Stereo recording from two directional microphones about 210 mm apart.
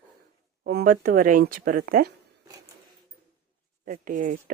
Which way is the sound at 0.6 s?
45° right (ahead or behind).